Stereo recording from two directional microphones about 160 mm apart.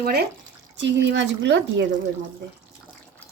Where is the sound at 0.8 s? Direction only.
90° right.